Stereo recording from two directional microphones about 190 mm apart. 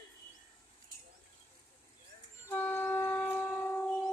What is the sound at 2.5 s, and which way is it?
Train, 10° left (ahead or behind).